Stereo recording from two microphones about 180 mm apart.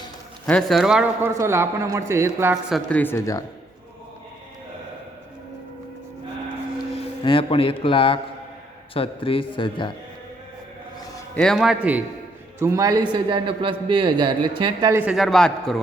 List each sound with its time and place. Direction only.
0.4 s a man's voice: 5° left (ahead or behind)
1.3 s speech: 15° right (ahead or behind)
2.7 s speech: 10° left (ahead or behind)
7.3 s a man's voice: 30° left (ahead or behind)
11.3 s a man's voice: centre (ahead or behind); by 14.9 s 25° right (ahead or behind)
14.9 s a man's voice: 5° right (ahead or behind)